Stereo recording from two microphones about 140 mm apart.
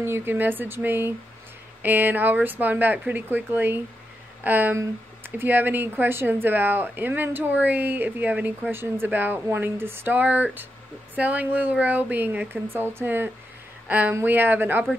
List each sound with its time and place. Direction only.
0.0 s speech: 15° right (ahead or behind)